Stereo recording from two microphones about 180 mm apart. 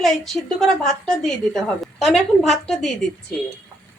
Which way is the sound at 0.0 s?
Centre (ahead or behind).